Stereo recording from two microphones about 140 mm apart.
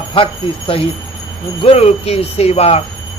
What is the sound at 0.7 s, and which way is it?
Speech, 40° left (ahead or behind).